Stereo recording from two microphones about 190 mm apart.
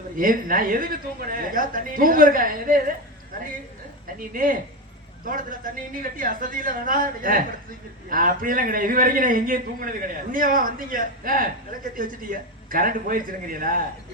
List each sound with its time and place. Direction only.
0.2 s a man's voice: 45° right (ahead or behind)
4.0 s a man's voice: 45° right (ahead or behind)